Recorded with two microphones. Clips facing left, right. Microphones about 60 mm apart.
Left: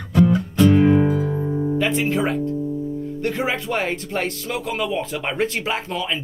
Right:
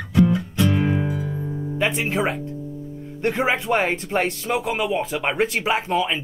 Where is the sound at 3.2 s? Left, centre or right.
Centre.